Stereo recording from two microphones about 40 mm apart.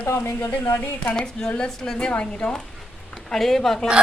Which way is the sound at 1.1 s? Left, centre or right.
Left.